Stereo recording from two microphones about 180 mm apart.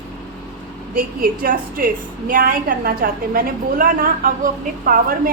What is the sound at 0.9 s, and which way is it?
A woman's voice, 55° right (ahead or behind).